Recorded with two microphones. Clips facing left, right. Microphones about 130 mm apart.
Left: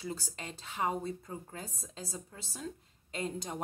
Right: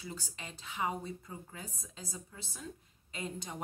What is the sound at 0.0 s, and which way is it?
A woman's voice, 35° left (ahead or behind).